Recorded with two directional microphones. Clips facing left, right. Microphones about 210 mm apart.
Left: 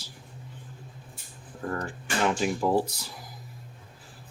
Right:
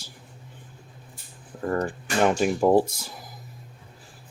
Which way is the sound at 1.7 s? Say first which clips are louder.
Right 7 dB; 50° right (ahead or behind).